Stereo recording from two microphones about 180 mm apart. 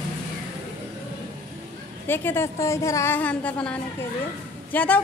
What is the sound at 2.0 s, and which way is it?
Speech, 10° left (ahead or behind).